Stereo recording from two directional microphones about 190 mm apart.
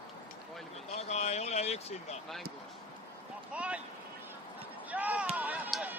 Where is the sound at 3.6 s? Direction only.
5° right (ahead or behind).